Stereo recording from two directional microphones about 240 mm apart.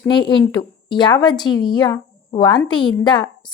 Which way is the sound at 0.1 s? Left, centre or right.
Centre.